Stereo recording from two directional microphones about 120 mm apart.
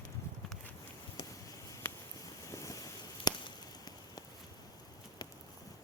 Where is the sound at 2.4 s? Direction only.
30° left (ahead or behind).